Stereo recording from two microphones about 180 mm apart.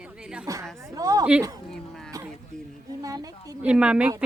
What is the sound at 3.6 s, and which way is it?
Speech, 5° right (ahead or behind).